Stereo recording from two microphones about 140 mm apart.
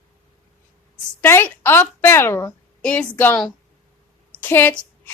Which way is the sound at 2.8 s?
10° left (ahead or behind).